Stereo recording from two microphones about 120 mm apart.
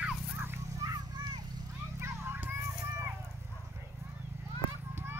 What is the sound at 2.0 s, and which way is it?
Children playing, 20° right (ahead or behind).